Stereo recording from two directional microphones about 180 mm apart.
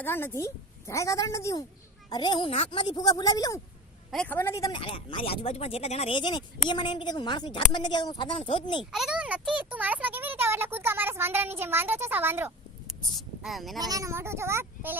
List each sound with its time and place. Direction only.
0.0 s a woman's voice: 10° left (ahead or behind)
4.1 s a woman's voice: 10° left (ahead or behind)
4.8 s a woman's voice: 30° left (ahead or behind)
8.8 s a child's voice: centre (ahead or behind)
13.0 s speech: centre (ahead or behind)
13.7 s a child's voice: 20° right (ahead or behind)